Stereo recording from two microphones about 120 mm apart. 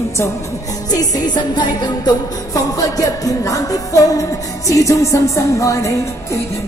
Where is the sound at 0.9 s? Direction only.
35° left (ahead or behind).